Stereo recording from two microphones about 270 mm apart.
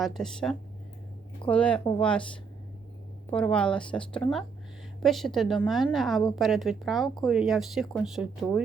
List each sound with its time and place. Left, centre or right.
0.0 s a woman's voice: centre